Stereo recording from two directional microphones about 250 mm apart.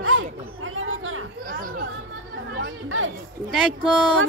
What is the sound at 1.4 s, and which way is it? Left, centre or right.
Chatter, right.